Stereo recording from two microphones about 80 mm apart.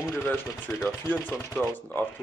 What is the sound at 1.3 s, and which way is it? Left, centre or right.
Speech, left.